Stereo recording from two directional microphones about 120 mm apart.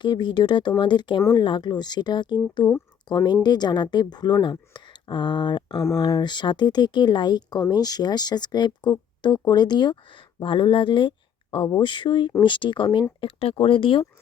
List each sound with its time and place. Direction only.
0.0 s speech: 40° left (ahead or behind)